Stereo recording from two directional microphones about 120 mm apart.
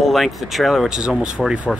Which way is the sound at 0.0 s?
Centre (ahead or behind).